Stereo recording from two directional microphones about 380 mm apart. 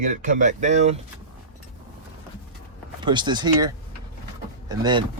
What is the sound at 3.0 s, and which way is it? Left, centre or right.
Speech, centre.